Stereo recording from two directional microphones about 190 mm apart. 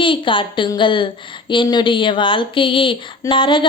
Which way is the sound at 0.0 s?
25° left (ahead or behind).